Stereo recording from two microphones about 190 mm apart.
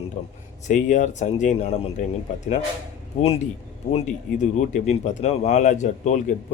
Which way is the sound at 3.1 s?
40° left (ahead or behind).